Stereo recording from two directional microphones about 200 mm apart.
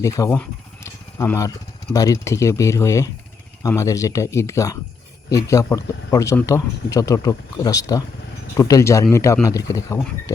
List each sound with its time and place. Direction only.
0.0 s speech: 15° left (ahead or behind)